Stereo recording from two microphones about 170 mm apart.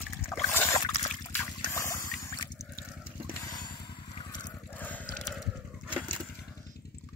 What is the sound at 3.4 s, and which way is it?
Vehicle, 25° left (ahead or behind).